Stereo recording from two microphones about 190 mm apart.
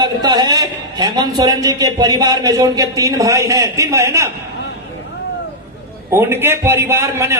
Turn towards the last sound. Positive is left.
turn(degrees=-15)  # may be behind; listen again after turning